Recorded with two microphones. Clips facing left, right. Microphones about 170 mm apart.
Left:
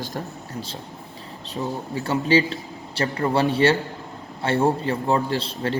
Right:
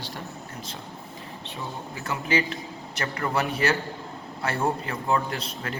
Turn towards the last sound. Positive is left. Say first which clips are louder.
# left 8 dB
turn(degrees=30)  # may be behind; listen again after turning